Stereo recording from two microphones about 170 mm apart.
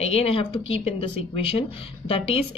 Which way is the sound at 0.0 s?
35° left (ahead or behind).